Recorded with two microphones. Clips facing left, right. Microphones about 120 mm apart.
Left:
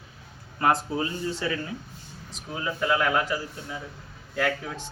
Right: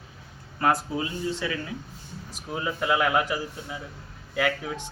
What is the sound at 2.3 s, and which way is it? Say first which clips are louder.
A man's voice: right 1 dB; 5° right (ahead or behind).